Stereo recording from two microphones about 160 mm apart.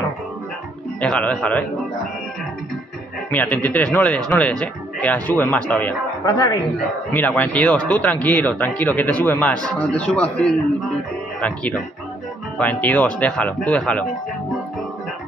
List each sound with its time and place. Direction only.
1.0 s a man's voice: 5° left (ahead or behind)
3.3 s a man's voice: 10° left (ahead or behind)
6.2 s a man's voice: 25° left (ahead or behind)
7.1 s speech: 10° left (ahead or behind)